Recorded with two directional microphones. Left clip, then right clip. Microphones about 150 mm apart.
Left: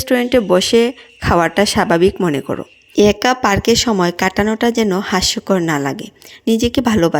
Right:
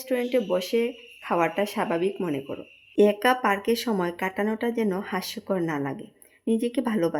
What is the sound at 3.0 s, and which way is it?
A woman's voice, 25° left (ahead or behind).